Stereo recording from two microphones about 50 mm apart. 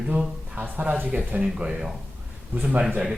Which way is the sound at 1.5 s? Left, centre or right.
Centre.